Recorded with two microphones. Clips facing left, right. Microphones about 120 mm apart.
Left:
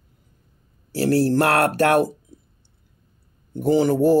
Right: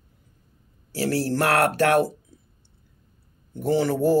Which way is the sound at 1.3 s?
40° left (ahead or behind).